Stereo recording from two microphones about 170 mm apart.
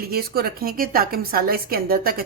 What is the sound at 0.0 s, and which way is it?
A woman's voice, 65° right (ahead or behind).